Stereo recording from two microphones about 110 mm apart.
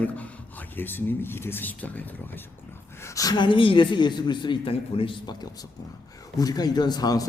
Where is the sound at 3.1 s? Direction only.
40° left (ahead or behind).